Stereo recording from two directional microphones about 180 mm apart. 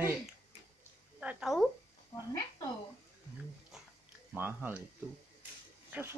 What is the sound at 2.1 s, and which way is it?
Speech, 20° left (ahead or behind).